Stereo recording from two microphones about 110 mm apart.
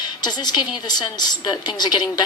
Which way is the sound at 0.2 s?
40° left (ahead or behind).